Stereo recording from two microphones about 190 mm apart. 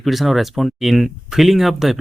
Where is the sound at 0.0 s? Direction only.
Centre (ahead or behind).